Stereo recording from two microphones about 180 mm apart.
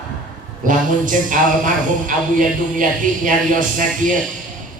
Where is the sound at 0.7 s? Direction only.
45° right (ahead or behind).